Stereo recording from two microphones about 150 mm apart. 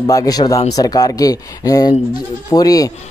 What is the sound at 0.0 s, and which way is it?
Speech, 25° left (ahead or behind).